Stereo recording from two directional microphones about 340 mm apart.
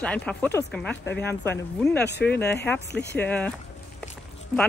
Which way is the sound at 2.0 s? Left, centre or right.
Left.